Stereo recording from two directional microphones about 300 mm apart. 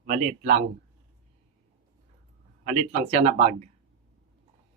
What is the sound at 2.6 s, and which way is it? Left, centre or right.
Speech, right.